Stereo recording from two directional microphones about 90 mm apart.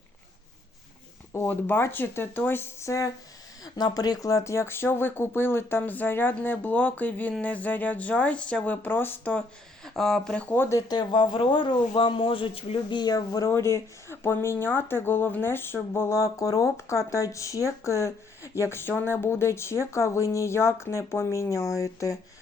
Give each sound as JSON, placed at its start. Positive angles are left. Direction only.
{"t": 1.3, "sound": "speech", "side_deg": 25}
{"t": 3.6, "sound": "speech", "side_deg": 45}
{"t": 9.8, "sound": "speech", "side_deg": 5}
{"t": 10.4, "sound": "speech", "side_deg": 20}
{"t": 10.7, "sound": "speech", "side_deg": 45}
{"t": 13.0, "sound": "speech", "side_deg": 45}
{"t": 13.5, "sound": "speech", "side_deg": 30}
{"t": 16.1, "sound": "speech", "side_deg": 40}